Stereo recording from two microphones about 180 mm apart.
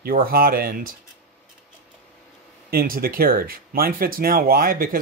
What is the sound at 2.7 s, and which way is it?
Speech, 55° right (ahead or behind).